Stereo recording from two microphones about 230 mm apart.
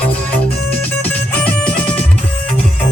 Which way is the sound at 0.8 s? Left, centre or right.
Centre.